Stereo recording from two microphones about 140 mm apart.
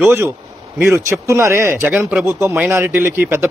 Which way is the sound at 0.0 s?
15° right (ahead or behind).